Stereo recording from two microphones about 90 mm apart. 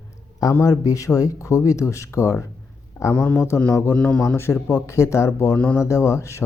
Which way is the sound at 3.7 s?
30° left (ahead or behind).